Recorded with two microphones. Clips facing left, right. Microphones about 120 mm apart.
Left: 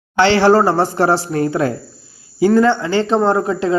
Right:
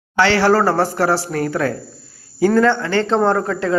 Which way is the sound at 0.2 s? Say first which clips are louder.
Left 3 dB; 20° left (ahead or behind).